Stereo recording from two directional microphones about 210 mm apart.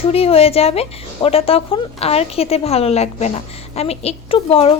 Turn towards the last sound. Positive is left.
turn(degrees=25)  # may be behind; listen again after turning